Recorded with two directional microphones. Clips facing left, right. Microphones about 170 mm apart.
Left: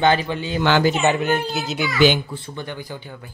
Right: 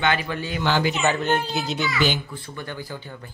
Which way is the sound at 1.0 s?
10° left (ahead or behind).